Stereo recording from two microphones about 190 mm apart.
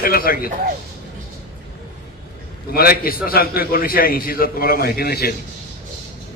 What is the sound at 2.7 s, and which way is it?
A man's voice, 50° left (ahead or behind).